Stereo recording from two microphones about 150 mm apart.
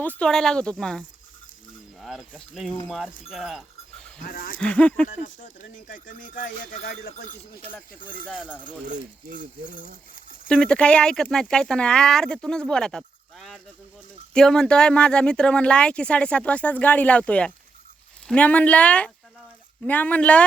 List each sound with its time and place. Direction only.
0.0 s speech: 10° left (ahead or behind)
3.2 s chink: centre (ahead or behind)
4.2 s speech: 70° left (ahead or behind)
4.6 s speech: 10° left (ahead or behind)
5.0 s speech: 60° left (ahead or behind)
8.3 s speech: 5° right (ahead or behind)
8.9 s speech: 60° right (ahead or behind)
9.8 s clip-clop: 70° left (ahead or behind)
10.5 s speech: 5° left (ahead or behind)